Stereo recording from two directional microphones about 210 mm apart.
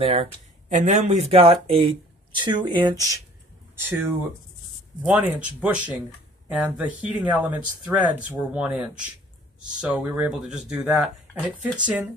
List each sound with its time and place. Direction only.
0.0 s speech: 30° right (ahead or behind)
5.0 s speech: 5° right (ahead or behind)